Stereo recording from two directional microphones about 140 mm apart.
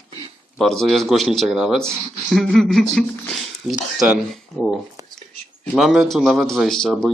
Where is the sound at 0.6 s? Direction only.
Centre (ahead or behind).